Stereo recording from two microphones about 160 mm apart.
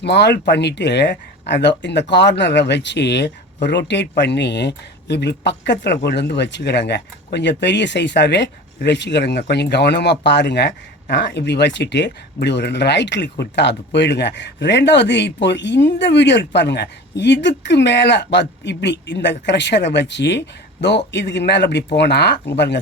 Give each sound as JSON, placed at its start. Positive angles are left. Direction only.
{"t": 0.0, "sound": "speech", "side_deg": 90}